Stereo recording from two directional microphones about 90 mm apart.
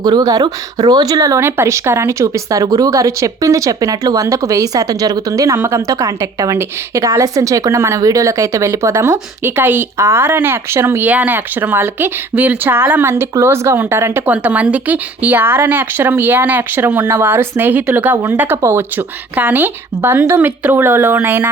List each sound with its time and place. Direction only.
0.0 s a woman's voice: 45° right (ahead or behind); by 14.1 s 30° right (ahead or behind)
14.3 s speech: 15° right (ahead or behind)